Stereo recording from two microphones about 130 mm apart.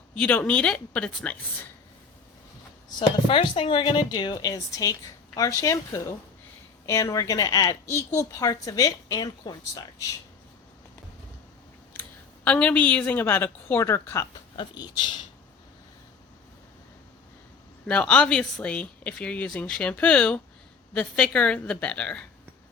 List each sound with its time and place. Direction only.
0.1 s a woman's voice: 10° left (ahead or behind)
3.2 s a woman's voice: 40° left (ahead or behind)
12.5 s a woman's voice: 10° left (ahead or behind)
14.5 s speech: 35° left (ahead or behind)
17.8 s a woman's voice: 10° left (ahead or behind)